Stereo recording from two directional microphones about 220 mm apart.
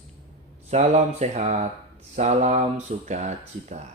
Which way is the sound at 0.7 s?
30° right (ahead or behind).